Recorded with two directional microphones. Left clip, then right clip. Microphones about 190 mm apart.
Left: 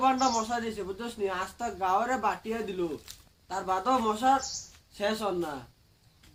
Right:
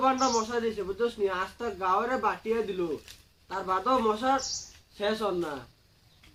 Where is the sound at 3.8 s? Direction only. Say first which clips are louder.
Left 1 dB; 20° left (ahead or behind).